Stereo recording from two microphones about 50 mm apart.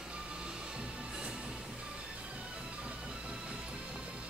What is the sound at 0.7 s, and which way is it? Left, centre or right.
Music, centre.